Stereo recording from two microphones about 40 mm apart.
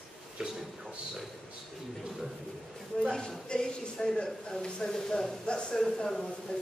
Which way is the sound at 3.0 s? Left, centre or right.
Centre.